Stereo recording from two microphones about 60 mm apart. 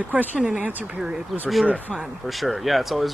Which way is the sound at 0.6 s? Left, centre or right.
Right.